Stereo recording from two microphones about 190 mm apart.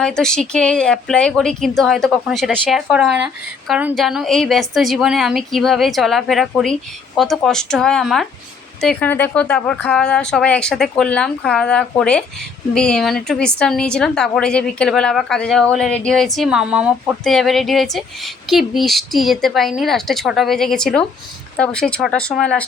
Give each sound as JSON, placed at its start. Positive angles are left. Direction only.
{"t": 0.0, "sound": "speech", "side_deg": 5}